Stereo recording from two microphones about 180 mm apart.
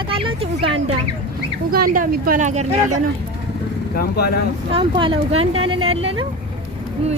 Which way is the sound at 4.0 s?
60° left (ahead or behind).